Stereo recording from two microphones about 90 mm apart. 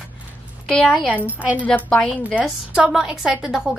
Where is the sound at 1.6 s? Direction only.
15° left (ahead or behind).